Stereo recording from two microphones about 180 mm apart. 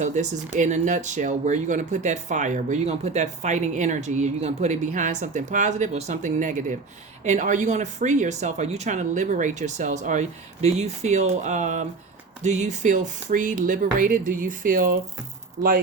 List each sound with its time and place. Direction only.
0.0 s speech: 40° right (ahead or behind)